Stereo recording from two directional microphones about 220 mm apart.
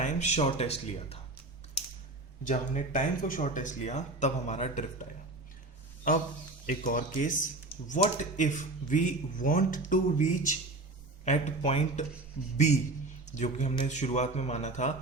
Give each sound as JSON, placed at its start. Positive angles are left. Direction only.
{"t": 0.0, "sound": "speech", "side_deg": 30}
{"t": 2.4, "sound": "speech", "side_deg": 35}
{"t": 6.7, "sound": "speech", "side_deg": 40}
{"t": 13.2, "sound": "speech", "side_deg": 35}